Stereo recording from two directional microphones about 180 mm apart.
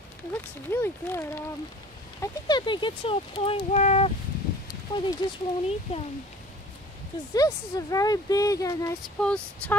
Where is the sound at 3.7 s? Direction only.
40° left (ahead or behind).